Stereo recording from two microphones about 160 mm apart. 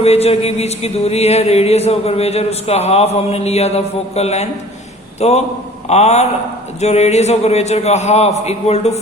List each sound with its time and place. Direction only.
0.0 s mantra: 40° left (ahead or behind)
5.9 s a man's voice: 45° left (ahead or behind)